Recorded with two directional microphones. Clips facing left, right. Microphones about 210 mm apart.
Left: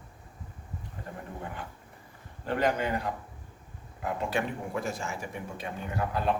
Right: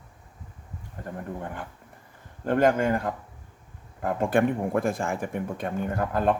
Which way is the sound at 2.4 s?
50° right (ahead or behind).